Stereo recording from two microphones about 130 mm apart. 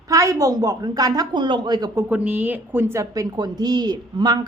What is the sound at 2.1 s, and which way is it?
A woman's voice, 10° right (ahead or behind).